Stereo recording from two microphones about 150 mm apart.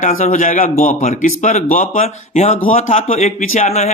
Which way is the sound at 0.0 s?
55° left (ahead or behind).